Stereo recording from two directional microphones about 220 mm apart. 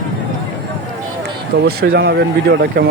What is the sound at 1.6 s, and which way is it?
Speech, 45° right (ahead or behind).